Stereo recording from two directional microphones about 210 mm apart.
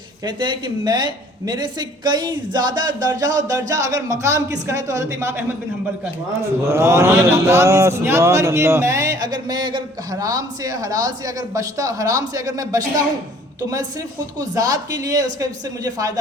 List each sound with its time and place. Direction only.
0.3 s a woman's voice: 20° right (ahead or behind)
6.7 s a man's voice: 10° right (ahead or behind)
14.3 s a man's voice: 15° right (ahead or behind)